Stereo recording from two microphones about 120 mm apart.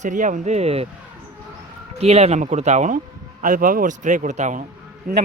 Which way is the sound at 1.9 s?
60° right (ahead or behind).